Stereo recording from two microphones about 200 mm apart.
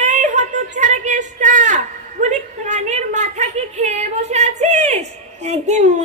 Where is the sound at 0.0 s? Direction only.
35° right (ahead or behind).